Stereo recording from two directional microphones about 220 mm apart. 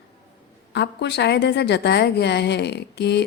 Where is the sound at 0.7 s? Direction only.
50° left (ahead or behind).